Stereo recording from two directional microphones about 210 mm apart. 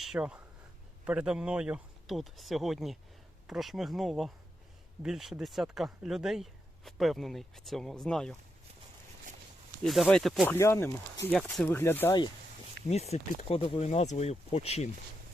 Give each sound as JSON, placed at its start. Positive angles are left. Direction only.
{"t": 0.0, "sound": "a sound", "side_deg": -5}
{"t": 1.0, "sound": "speech", "side_deg": -5}
{"t": 9.8, "sound": "speech", "side_deg": 0}
{"t": 12.9, "sound": "speech", "side_deg": 30}